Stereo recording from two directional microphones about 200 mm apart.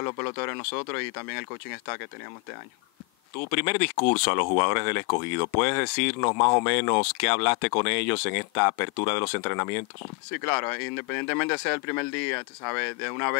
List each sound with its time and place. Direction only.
0.0 s speech: 15° left (ahead or behind)
3.5 s speech: 10° left (ahead or behind)
6.2 s speech: 20° left (ahead or behind)